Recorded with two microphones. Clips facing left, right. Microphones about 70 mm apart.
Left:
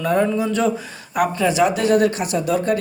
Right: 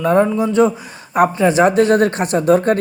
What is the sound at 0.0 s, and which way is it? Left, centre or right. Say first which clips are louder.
Speech: right 4 dB; right.